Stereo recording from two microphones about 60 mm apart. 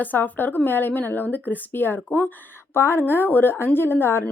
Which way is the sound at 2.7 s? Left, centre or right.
Left.